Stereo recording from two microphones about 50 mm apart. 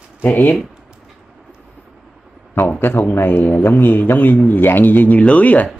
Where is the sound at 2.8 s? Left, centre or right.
Left.